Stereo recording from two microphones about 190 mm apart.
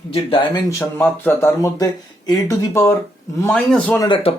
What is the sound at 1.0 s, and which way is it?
Speech, 10° left (ahead or behind).